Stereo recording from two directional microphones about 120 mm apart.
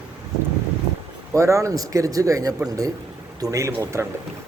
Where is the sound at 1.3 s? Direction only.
25° right (ahead or behind).